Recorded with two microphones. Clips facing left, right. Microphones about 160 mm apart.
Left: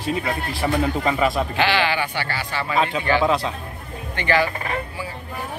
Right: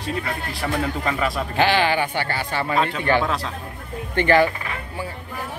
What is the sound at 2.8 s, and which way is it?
Speech, 5° left (ahead or behind).